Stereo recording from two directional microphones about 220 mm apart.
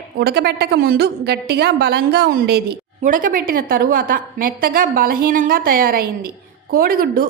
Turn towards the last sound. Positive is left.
turn(degrees=-40)  # may be behind; listen again after turning